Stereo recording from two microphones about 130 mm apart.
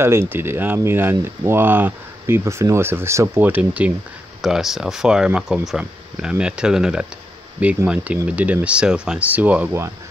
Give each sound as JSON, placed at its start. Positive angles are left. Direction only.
{"t": 0.0, "sound": "speech", "side_deg": -20}